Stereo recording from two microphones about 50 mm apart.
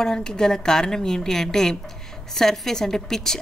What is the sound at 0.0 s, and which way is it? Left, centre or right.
A woman's voice, centre.